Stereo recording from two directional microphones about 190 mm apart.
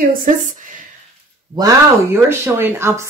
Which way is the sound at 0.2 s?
40° right (ahead or behind).